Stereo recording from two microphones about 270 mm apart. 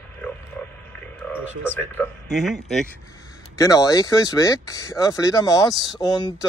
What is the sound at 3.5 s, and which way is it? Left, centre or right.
Speech, centre.